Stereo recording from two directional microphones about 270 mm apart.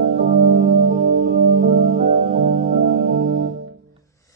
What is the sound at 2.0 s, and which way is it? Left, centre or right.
Music, right.